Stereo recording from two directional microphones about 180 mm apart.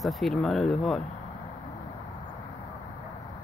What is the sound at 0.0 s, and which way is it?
Speech, centre (ahead or behind).